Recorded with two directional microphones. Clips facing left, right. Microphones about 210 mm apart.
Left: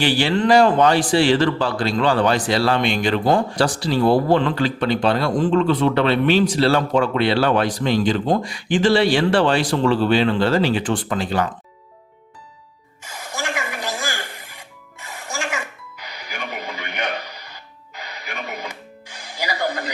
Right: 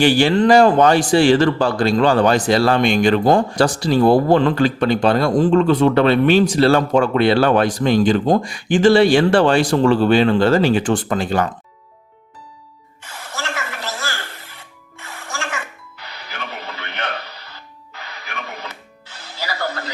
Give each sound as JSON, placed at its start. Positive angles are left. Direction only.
{"t": 0.0, "sound": "speech", "side_deg": -45}
{"t": 13.1, "sound": "music", "side_deg": 10}